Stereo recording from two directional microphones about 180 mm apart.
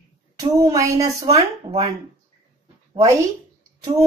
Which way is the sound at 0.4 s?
20° right (ahead or behind).